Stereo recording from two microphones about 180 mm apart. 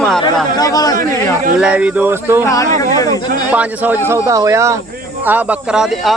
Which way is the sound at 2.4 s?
20° left (ahead or behind).